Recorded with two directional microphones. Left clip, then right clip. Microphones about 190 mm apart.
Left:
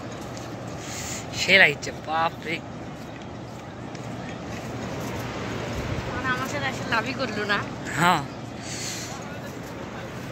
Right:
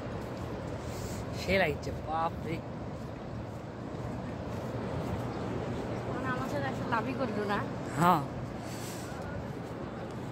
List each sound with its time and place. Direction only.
1.4 s speech: centre (ahead or behind)
6.6 s speech: 40° right (ahead or behind)
8.0 s speech: 20° right (ahead or behind)